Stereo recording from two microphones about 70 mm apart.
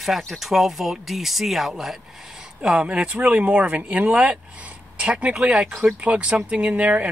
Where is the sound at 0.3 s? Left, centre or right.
Centre.